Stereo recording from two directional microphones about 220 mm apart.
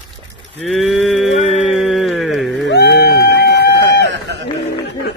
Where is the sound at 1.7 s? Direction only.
Centre (ahead or behind).